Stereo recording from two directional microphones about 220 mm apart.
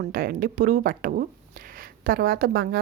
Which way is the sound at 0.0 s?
45° right (ahead or behind).